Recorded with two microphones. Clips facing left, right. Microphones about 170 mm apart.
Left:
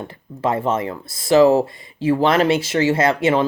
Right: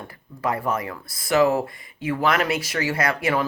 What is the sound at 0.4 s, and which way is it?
Speech, 25° left (ahead or behind).